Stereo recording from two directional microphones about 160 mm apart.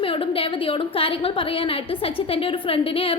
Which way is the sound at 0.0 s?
35° left (ahead or behind).